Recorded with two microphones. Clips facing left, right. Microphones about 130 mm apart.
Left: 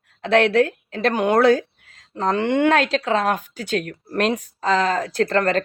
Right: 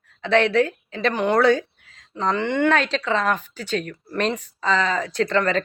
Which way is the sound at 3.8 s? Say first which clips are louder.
Left 1 dB; 55° left (ahead or behind).